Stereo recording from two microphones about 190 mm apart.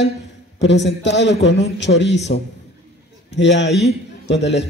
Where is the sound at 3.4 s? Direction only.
70° left (ahead or behind).